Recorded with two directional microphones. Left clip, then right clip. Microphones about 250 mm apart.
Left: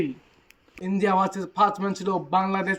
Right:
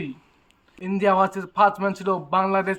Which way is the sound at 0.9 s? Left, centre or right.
Centre.